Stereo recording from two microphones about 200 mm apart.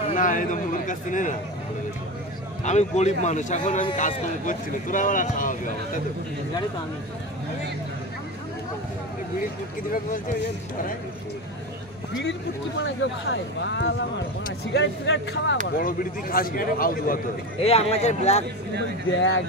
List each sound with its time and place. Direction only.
0.1 s speech: 40° left (ahead or behind)
2.6 s speech: 35° left (ahead or behind)
12.2 s speech: 65° left (ahead or behind)
15.6 s speech: 45° left (ahead or behind)
17.6 s speech: 30° left (ahead or behind)
19.1 s speech: 70° left (ahead or behind)